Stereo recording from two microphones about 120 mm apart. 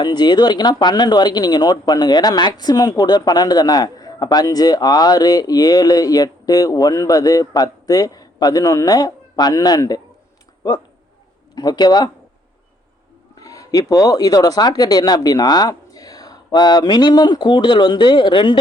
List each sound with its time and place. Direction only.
0.0 s speech: 35° left (ahead or behind)
11.5 s speech: 35° left (ahead or behind)
13.3 s speech: 30° left (ahead or behind)